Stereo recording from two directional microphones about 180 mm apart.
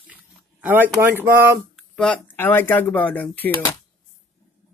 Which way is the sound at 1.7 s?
5° left (ahead or behind).